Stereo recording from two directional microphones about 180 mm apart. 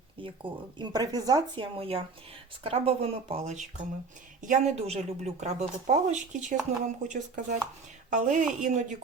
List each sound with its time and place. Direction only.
0.2 s a woman's voice: 30° right (ahead or behind)